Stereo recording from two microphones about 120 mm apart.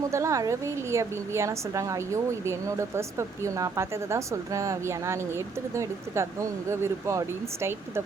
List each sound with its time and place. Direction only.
0.1 s a woman's voice: 25° right (ahead or behind)